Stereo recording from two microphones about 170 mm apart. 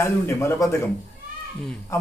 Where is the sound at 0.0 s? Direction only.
15° left (ahead or behind).